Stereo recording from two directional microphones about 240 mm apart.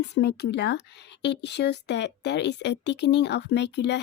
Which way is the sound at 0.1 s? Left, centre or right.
Left.